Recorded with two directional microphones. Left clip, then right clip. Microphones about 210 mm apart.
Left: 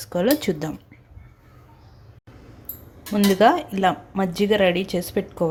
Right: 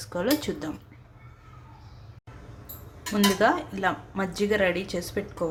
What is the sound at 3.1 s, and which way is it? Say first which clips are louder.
A woman's voice: left 6 dB; 25° left (ahead or behind).